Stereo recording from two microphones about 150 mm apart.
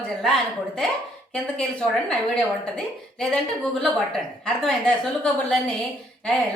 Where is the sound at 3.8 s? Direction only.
5° left (ahead or behind).